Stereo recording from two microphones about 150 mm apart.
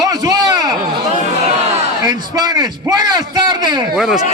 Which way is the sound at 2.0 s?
25° right (ahead or behind).